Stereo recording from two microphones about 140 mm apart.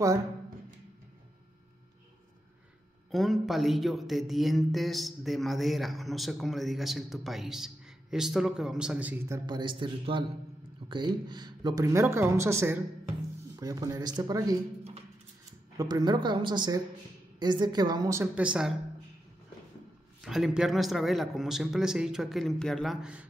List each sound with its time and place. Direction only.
3.1 s speech: centre (ahead or behind)
9.5 s a woman's voice: 35° right (ahead or behind)
15.8 s a woman's voice: 30° right (ahead or behind); by 18.8 s 5° right (ahead or behind)
20.2 s speech: 5° right (ahead or behind)